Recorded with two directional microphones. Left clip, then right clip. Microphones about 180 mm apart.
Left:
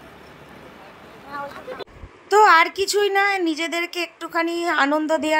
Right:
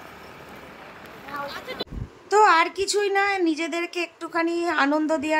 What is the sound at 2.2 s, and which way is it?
A woman's voice, 20° left (ahead or behind).